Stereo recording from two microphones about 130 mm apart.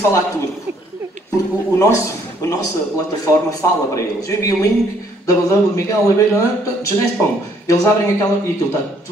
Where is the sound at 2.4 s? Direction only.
25° left (ahead or behind).